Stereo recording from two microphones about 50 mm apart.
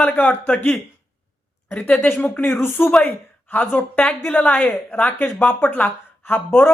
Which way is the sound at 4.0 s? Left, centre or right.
Left.